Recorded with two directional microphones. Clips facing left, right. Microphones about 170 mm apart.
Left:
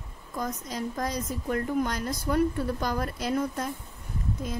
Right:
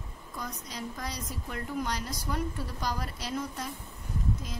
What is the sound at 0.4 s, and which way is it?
A woman's voice, 45° left (ahead or behind).